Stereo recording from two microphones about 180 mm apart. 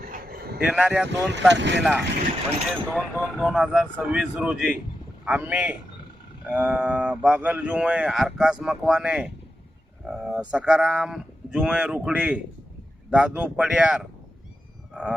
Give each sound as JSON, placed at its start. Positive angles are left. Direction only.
{"t": 0.0, "sound": "vehicle", "side_deg": -55}
{"t": 0.6, "sound": "speech", "side_deg": -5}
{"t": 1.3, "sound": "speech", "side_deg": -80}
{"t": 1.8, "sound": "speech", "side_deg": -5}
{"t": 10.0, "sound": "a sound", "side_deg": -5}
{"t": 10.5, "sound": "speech", "side_deg": -5}